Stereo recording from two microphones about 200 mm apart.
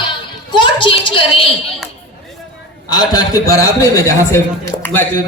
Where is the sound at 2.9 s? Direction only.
20° left (ahead or behind).